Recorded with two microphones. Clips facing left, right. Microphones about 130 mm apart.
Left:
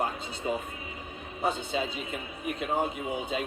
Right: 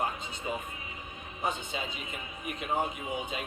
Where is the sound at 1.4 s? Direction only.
35° left (ahead or behind).